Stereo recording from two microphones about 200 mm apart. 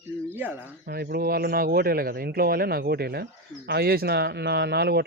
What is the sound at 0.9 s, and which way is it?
A man's voice, 50° right (ahead or behind).